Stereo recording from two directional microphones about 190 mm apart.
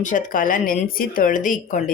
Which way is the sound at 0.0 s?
45° left (ahead or behind).